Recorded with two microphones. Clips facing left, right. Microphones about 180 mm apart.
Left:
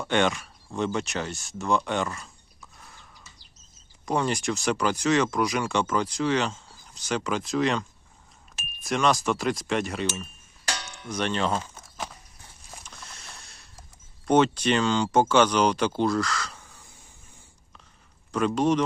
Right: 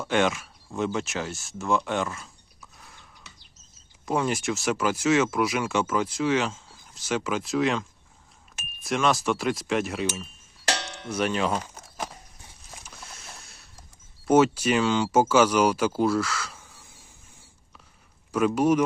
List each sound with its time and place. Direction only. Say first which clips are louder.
0.0 s speech: even; centre (ahead or behind)
3.3 s a sound: right 3 dB; 70° right (ahead or behind)
4.0 s speech: even; 5° right (ahead or behind)
10.7 s music: right 5 dB; 65° right (ahead or behind)
11.1 s speech: right 1 dB; 5° right (ahead or behind)
12.8 s a sound: right 1 dB; 5° right (ahead or behind)
14.3 s speech: right 1 dB; 5° right (ahead or behind)
18.3 s speech: right 2 dB; 10° right (ahead or behind)